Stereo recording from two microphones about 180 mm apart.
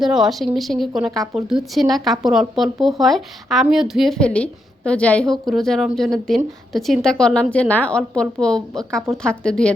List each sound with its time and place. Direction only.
0.0 s a woman's voice: centre (ahead or behind)